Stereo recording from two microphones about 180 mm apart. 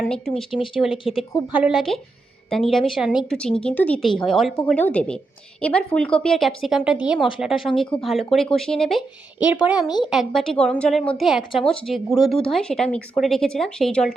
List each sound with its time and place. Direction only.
0.0 s speech: centre (ahead or behind)
0.5 s speech: 30° left (ahead or behind)
1.1 s speech: 5° right (ahead or behind)